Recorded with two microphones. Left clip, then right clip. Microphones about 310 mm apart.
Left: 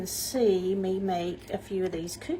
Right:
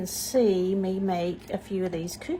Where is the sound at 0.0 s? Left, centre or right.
Centre.